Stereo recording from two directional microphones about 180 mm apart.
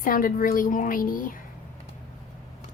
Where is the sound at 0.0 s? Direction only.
50° left (ahead or behind).